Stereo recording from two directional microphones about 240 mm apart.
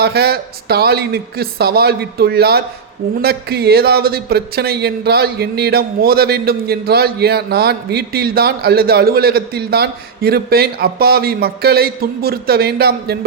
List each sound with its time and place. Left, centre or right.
0.0 s a man's voice: right